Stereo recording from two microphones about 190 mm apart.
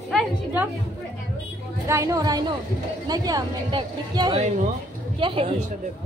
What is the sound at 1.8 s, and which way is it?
A woman's voice, 15° right (ahead or behind).